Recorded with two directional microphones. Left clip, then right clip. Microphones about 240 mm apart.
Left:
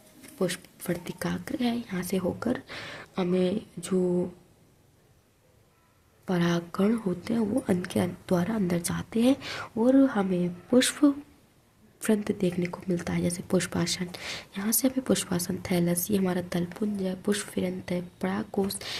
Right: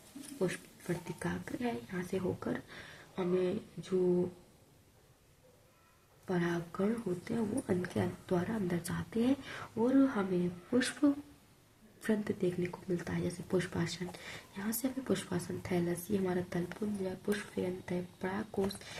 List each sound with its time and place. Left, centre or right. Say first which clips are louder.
0.3 s speech: left 6 dB; left
6.2 s speech: left 7 dB; left